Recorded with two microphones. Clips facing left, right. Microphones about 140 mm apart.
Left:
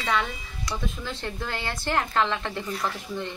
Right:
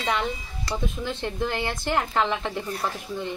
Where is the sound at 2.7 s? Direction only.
30° right (ahead or behind).